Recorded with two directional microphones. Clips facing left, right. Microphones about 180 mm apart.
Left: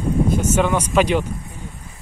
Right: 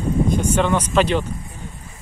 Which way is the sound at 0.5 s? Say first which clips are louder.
Even; 10° left (ahead or behind).